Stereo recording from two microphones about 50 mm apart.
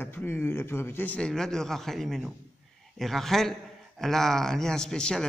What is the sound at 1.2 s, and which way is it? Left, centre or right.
A man's voice, centre.